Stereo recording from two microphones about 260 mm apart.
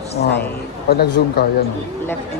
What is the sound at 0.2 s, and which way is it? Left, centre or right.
Speech, left.